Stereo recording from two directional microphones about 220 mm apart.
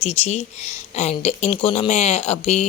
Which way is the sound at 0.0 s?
30° left (ahead or behind).